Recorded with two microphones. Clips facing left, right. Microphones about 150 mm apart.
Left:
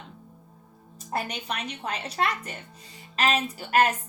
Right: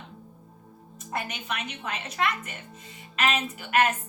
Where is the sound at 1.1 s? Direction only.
35° left (ahead or behind).